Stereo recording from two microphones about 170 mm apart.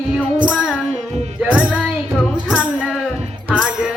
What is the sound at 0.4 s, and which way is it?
Child singing, 5° right (ahead or behind).